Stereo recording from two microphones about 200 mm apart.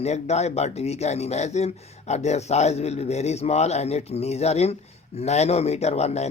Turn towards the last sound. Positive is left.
turn(degrees=35)  # may be behind; listen again after turning